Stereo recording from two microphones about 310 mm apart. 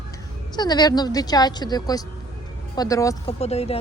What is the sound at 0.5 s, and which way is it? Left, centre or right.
Speech, centre.